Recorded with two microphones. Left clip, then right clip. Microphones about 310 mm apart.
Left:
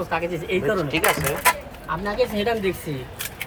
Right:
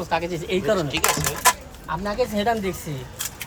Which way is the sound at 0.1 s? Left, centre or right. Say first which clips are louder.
Right 2 dB; right.